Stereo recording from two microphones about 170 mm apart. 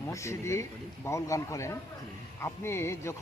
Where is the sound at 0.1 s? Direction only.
15° left (ahead or behind).